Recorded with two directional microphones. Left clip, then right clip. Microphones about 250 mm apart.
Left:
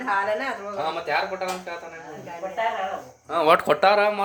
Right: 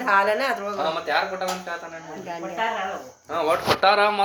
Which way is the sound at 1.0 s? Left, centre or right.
Centre.